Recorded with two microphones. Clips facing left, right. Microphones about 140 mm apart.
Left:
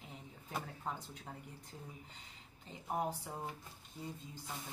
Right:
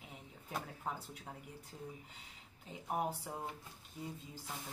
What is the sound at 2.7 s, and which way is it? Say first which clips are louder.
A woman's voice: even; 10° right (ahead or behind).